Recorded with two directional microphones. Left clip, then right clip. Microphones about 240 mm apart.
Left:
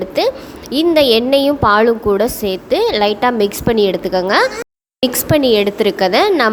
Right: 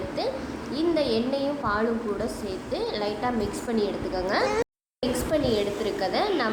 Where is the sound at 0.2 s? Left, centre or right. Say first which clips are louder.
Left 14 dB; left.